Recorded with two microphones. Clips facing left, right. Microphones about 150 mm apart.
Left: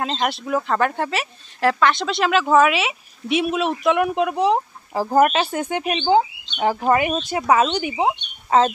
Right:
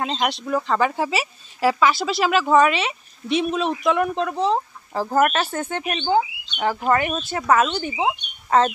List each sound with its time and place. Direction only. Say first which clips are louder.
0.0 s speech: even; centre (ahead or behind)